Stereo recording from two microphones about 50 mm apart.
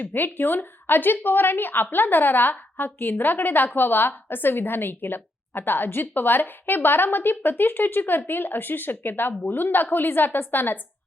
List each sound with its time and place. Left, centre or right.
0.0 s a woman's voice: left